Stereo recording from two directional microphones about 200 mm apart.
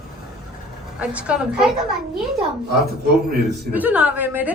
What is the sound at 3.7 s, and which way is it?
Speech, 10° right (ahead or behind).